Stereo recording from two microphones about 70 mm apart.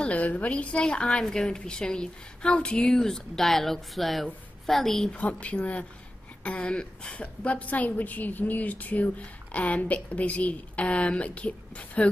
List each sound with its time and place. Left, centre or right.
0.0 s a woman's voice: left; by 5.1 s centre
5.1 s a woman's voice: centre